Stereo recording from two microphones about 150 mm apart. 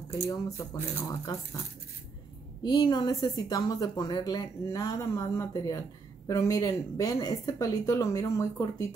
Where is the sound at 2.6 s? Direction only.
25° left (ahead or behind).